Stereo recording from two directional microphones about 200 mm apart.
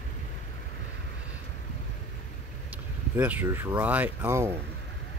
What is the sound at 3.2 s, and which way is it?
Speech, 10° right (ahead or behind).